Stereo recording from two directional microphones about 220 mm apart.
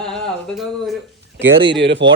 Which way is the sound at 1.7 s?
55° right (ahead or behind).